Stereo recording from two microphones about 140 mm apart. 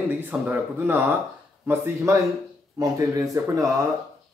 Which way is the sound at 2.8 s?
25° right (ahead or behind).